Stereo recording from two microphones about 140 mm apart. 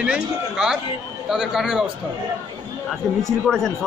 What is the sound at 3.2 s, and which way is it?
Speech, 5° left (ahead or behind).